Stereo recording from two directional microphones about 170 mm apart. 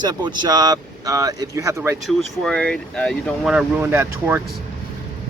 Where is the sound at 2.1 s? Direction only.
Centre (ahead or behind).